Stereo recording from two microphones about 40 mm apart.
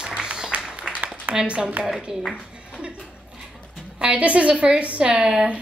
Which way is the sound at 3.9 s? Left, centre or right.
Right.